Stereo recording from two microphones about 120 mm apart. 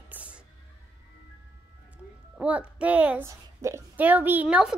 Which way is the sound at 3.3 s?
25° right (ahead or behind).